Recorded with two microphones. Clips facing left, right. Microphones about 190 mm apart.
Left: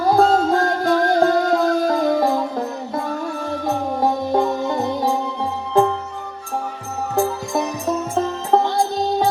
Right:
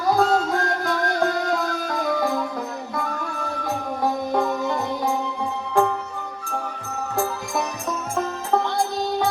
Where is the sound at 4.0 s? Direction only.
30° left (ahead or behind).